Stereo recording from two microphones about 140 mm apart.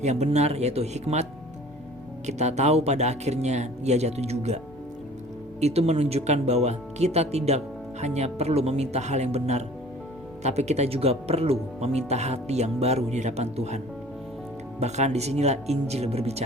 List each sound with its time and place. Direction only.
0.0 s speech: 55° right (ahead or behind)